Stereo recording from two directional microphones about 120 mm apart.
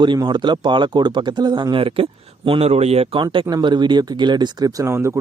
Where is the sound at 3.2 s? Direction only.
40° right (ahead or behind); by 5.2 s 25° right (ahead or behind).